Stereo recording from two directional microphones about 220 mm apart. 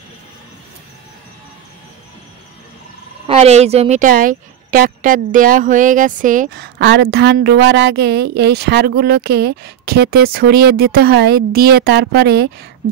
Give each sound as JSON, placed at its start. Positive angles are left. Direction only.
{"t": 3.3, "sound": "speech", "side_deg": -30}